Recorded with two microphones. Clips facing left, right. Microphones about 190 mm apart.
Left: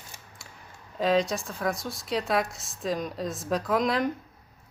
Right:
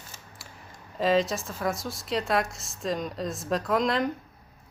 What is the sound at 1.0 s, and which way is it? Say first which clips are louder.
Speech: even; centre (ahead or behind).